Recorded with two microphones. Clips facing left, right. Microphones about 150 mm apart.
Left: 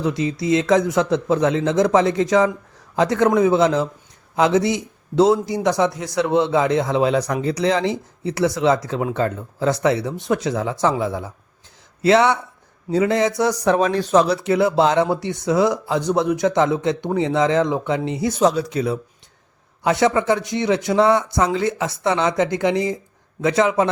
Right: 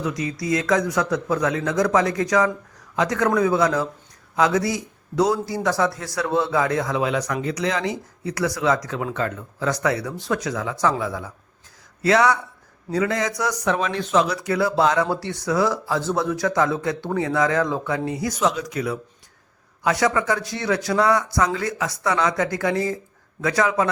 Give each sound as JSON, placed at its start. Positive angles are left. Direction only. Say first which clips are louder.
{"t": 0.0, "sound": "a man's voice", "louder": "left 5 dB", "side_deg": 25}
{"t": 14.3, "sound": "speech", "louder": "left 4 dB", "side_deg": 25}